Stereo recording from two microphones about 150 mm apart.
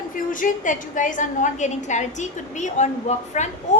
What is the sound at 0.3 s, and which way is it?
A woman's voice, 60° left (ahead or behind).